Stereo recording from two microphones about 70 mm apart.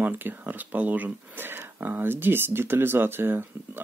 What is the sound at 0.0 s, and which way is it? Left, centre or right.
Speech, right.